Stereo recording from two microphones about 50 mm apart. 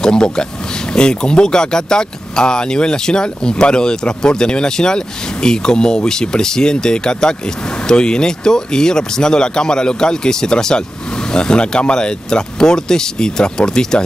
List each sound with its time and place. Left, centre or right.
0.0 s speech: centre